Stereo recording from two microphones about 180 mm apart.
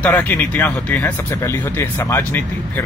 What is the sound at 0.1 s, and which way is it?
Speech, 10° left (ahead or behind).